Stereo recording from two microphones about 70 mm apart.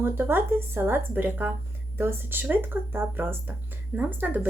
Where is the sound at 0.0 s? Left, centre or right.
Right.